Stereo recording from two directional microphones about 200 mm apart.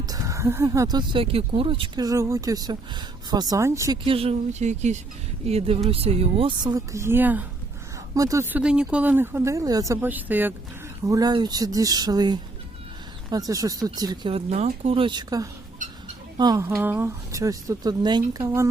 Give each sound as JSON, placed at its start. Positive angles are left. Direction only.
{"t": 0.0, "sound": "speech", "side_deg": -15}